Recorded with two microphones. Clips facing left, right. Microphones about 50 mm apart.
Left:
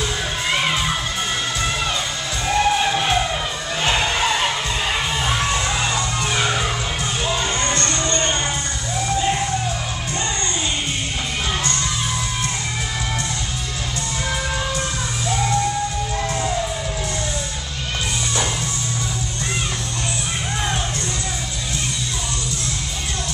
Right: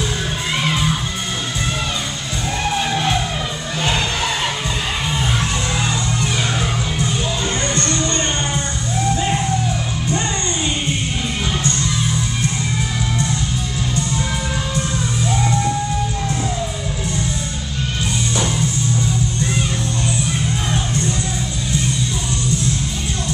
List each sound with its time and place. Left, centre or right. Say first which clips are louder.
0.5 s music: even; centre
2.4 s music: left 3 dB; centre
7.2 s music: even; left